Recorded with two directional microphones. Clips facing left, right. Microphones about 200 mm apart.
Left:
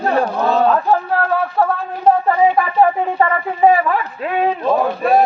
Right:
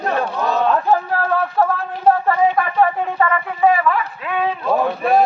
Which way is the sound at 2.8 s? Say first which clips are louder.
Left 3 dB; 30° left (ahead or behind).